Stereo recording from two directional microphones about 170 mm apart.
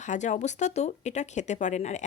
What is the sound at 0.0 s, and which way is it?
Speech, 45° left (ahead or behind).